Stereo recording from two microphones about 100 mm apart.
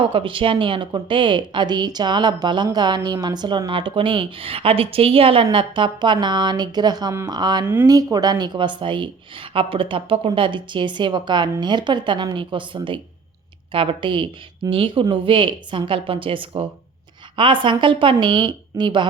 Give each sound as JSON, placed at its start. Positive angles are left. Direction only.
{"t": 0.0, "sound": "a woman's voice", "side_deg": -60}
{"t": 7.6, "sound": "speech", "side_deg": -20}
{"t": 7.9, "sound": "a woman's voice", "side_deg": -40}